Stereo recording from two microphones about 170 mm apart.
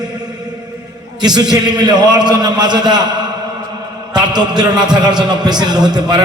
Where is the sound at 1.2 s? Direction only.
25° right (ahead or behind).